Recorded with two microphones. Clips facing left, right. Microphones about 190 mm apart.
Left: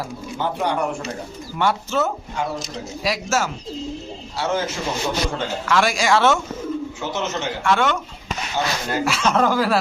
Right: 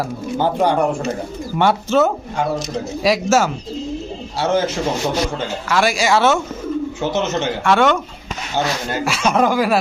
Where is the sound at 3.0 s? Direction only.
90° right.